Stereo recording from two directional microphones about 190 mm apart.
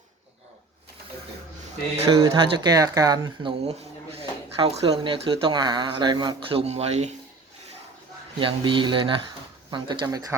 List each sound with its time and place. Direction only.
2.0 s speech: 15° right (ahead or behind)
3.7 s speech: 30° right (ahead or behind)
8.4 s speech: 25° right (ahead or behind)